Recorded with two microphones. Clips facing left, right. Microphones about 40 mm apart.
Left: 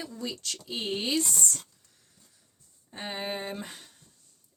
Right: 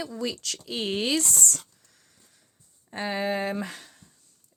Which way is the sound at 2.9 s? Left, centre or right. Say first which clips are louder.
Right 7 dB; right.